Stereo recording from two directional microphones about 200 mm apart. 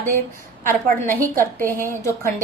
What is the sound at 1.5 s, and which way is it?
Speech, 10° left (ahead or behind).